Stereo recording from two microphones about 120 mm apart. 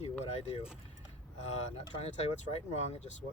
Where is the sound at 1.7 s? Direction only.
60° left (ahead or behind).